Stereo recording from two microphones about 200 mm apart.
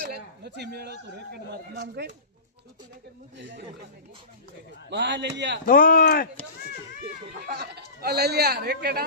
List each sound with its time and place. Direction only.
0.0 s speech: 55° right (ahead or behind)
3.3 s a man's voice: 65° right (ahead or behind)
4.9 s a man's voice: 60° right (ahead or behind)
5.6 s speech: 45° left (ahead or behind)
7.3 s speech: 55° right (ahead or behind)